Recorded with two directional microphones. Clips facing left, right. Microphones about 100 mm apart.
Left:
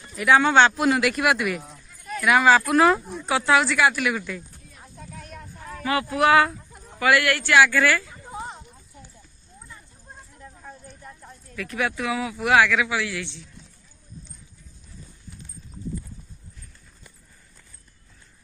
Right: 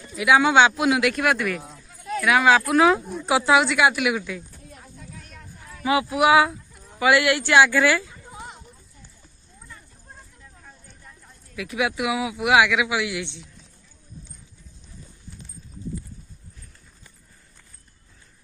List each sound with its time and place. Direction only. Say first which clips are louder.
0.1 s speech: even; 5° right (ahead or behind)
3.3 s speech: right 2 dB; 10° right (ahead or behind)
5.1 s a sound: left 4 dB; 55° left (ahead or behind)
5.9 s speech: right 1 dB; 15° right (ahead or behind)
8.1 s a sound: left 5 dB; 30° left (ahead or behind)
10.4 s clip-clop: left 7 dB; 55° left (ahead or behind)
11.5 s speech: right 2 dB; 10° right (ahead or behind)